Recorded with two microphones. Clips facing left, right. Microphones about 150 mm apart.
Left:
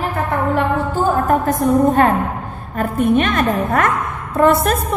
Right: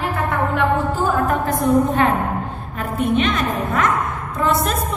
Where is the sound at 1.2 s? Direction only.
45° left (ahead or behind).